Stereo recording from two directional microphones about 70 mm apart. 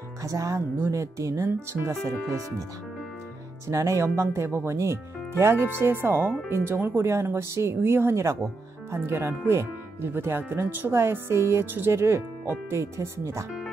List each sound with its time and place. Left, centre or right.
0.2 s speech: right
3.6 s speech: right